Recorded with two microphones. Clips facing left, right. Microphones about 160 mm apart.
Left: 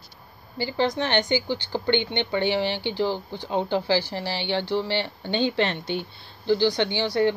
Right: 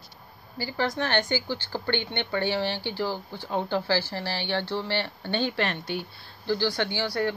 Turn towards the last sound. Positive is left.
turn(degrees=20)  # may be behind; listen again after turning